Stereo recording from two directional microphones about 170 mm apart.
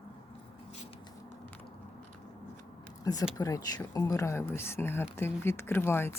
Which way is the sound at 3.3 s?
20° left (ahead or behind).